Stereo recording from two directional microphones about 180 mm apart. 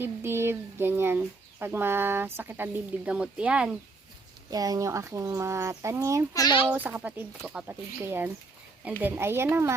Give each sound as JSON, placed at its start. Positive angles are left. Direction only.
{"t": 0.0, "sound": "speech", "side_deg": -15}
{"t": 4.5, "sound": "speech", "side_deg": -20}
{"t": 6.3, "sound": "a child's voice", "side_deg": 25}
{"t": 6.7, "sound": "speech", "side_deg": -10}